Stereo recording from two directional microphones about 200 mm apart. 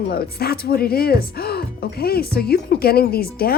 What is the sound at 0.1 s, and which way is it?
Speech, 50° left (ahead or behind).